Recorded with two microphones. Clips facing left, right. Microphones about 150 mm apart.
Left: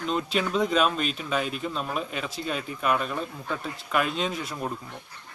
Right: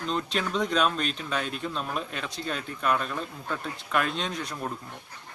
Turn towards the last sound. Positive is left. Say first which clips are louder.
# left 3 dB
turn(degrees=5)  # may be behind; listen again after turning